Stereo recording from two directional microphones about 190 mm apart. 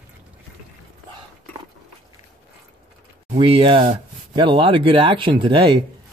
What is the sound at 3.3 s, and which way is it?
Speech, 25° right (ahead or behind).